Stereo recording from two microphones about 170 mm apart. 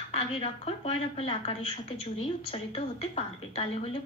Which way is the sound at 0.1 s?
35° left (ahead or behind).